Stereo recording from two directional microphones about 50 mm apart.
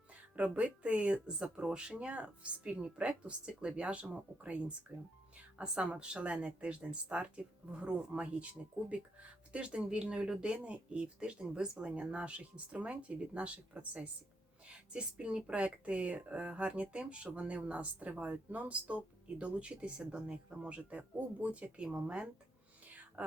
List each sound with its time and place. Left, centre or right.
0.3 s speech: right
9.5 s speech: right
22.9 s whispering: right